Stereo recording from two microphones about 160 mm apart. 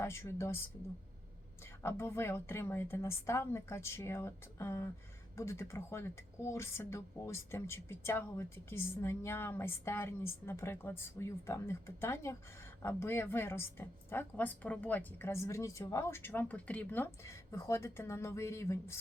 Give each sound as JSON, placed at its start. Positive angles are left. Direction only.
{"t": 0.0, "sound": "speech", "side_deg": 15}
{"t": 1.8, "sound": "speech", "side_deg": 15}